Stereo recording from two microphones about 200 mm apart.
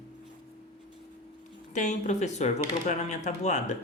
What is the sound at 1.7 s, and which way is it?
Speech, 35° left (ahead or behind).